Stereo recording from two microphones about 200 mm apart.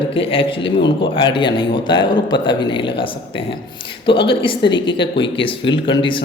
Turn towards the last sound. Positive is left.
turn(degrees=25)  # may be behind; listen again after turning